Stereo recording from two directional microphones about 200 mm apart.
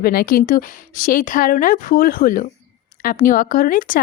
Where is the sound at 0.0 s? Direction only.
50° left (ahead or behind).